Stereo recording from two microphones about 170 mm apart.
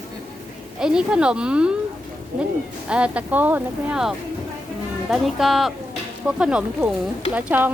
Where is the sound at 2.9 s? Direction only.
5° right (ahead or behind).